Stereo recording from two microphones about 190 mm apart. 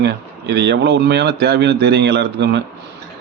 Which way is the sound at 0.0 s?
65° right (ahead or behind).